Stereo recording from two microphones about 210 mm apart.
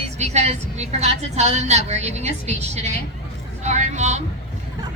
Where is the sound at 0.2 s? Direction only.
30° right (ahead or behind).